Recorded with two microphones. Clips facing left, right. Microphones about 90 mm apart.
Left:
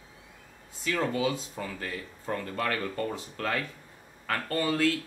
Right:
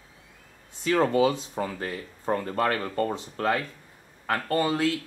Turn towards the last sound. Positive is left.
turn(degrees=-20)  # may be behind; listen again after turning